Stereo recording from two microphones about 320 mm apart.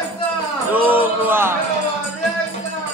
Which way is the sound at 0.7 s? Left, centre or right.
Centre.